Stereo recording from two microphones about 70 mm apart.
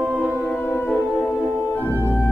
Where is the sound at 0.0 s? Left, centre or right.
Right.